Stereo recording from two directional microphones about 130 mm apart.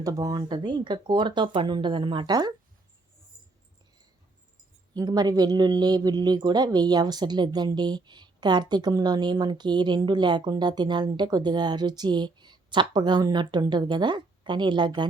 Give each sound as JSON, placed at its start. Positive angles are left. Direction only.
{"t": 0.0, "sound": "speech", "side_deg": -30}
{"t": 4.9, "sound": "speech", "side_deg": -30}